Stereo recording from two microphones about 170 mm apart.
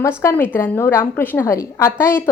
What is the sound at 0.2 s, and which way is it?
A woman's voice, 15° left (ahead or behind).